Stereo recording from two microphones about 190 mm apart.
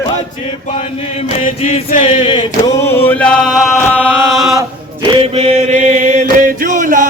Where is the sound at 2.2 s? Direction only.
25° left (ahead or behind).